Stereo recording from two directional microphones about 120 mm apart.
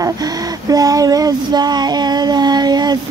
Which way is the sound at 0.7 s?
30° right (ahead or behind).